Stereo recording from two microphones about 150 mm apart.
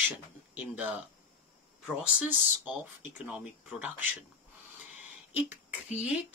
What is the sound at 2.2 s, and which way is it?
Speech, 10° right (ahead or behind).